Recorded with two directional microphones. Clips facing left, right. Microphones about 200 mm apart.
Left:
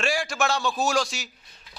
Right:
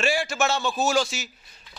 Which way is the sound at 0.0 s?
5° right (ahead or behind).